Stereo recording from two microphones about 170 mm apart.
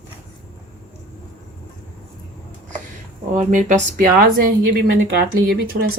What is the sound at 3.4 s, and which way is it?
Speech, 45° right (ahead or behind).